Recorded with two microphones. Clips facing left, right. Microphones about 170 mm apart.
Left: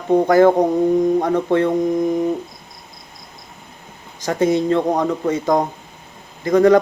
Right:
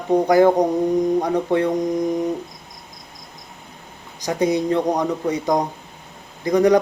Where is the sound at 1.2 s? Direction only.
15° right (ahead or behind).